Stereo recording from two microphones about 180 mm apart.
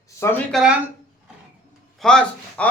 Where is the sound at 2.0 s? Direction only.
5° left (ahead or behind).